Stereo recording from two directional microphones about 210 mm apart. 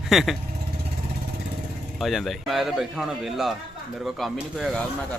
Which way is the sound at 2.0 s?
Centre (ahead or behind).